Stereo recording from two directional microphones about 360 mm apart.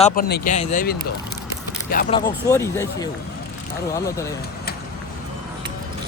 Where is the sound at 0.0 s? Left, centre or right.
Left.